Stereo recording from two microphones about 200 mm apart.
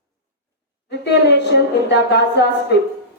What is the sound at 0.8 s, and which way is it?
Speech, 55° left (ahead or behind).